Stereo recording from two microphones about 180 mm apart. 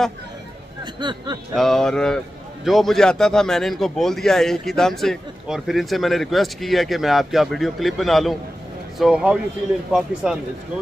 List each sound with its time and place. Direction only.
0.9 s speech: 25° right (ahead or behind)
1.5 s a man's voice: centre (ahead or behind)